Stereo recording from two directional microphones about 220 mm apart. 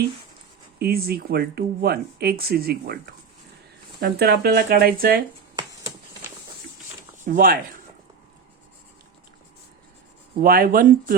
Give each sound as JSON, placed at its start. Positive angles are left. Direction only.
{"t": 0.8, "sound": "speech", "side_deg": -45}
{"t": 7.3, "sound": "speech", "side_deg": -40}
{"t": 10.4, "sound": "speech", "side_deg": -40}